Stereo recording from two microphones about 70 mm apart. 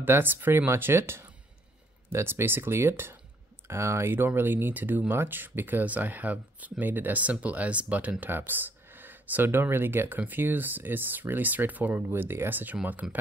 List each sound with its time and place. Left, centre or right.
0.0 s speech: right